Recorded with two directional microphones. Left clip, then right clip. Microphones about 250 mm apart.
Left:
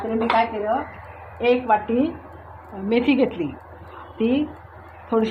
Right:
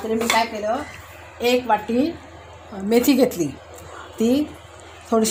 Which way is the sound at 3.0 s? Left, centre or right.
Right.